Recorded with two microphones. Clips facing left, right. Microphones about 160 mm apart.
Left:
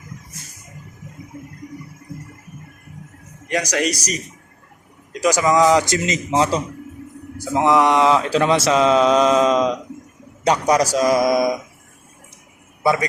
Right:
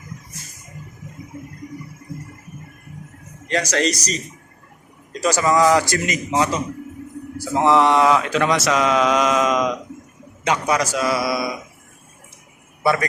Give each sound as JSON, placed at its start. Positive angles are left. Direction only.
{"t": 3.5, "sound": "speech", "side_deg": 15}
{"t": 7.3, "sound": "a man's voice", "side_deg": 15}
{"t": 12.8, "sound": "a man's voice", "side_deg": 15}